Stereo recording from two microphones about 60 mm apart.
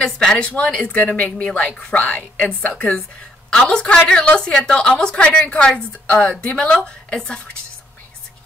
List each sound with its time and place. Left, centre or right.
0.0 s a woman's voice: centre
0.4 s a woman's voice: centre